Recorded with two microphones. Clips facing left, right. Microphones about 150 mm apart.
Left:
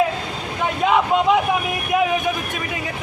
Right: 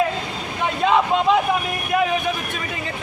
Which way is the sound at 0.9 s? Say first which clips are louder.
Even; 10° left (ahead or behind).